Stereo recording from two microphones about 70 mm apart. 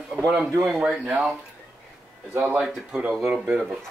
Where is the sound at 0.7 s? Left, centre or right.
Centre.